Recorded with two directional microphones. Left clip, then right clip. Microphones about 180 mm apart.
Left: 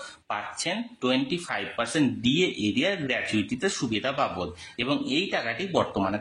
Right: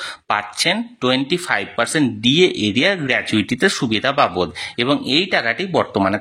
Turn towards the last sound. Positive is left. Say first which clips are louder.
# right 8 dB
turn(degrees=-35)  # may be behind; listen again after turning